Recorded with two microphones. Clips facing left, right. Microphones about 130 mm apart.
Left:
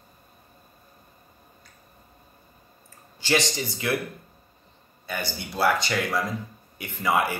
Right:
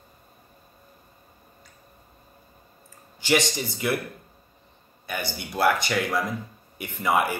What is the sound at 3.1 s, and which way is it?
Speech, 15° right (ahead or behind).